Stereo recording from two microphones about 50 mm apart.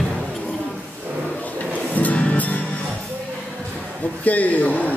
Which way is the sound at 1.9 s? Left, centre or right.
Left.